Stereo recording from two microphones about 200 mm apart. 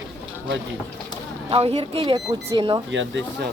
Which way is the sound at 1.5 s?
30° right (ahead or behind).